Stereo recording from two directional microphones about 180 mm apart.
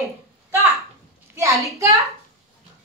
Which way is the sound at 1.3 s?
15° right (ahead or behind).